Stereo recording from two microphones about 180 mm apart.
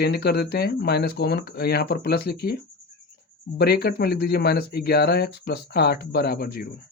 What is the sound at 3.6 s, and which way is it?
Speech, 60° left (ahead or behind).